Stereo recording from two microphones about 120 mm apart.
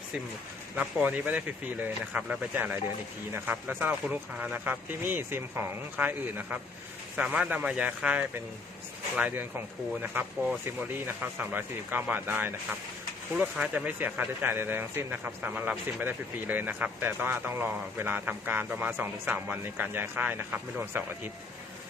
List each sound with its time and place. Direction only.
0.8 s speech: 10° right (ahead or behind)